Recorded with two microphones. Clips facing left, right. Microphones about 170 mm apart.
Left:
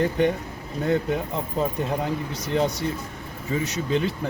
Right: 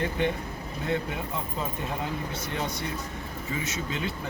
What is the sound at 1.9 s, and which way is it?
Speech, 35° left (ahead or behind).